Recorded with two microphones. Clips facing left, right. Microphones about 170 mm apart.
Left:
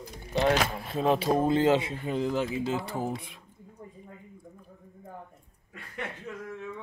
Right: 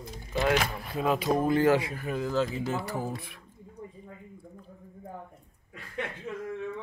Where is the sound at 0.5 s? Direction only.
25° left (ahead or behind).